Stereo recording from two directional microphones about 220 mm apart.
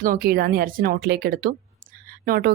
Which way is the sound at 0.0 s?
40° right (ahead or behind).